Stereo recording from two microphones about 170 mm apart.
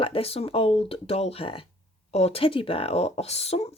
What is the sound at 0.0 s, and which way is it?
Speech, 35° left (ahead or behind).